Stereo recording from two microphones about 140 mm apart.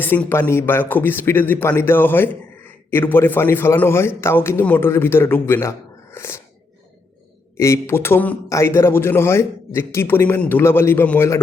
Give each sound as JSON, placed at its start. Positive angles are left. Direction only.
{"t": 0.0, "sound": "a man's voice", "side_deg": 15}
{"t": 7.5, "sound": "a man's voice", "side_deg": 20}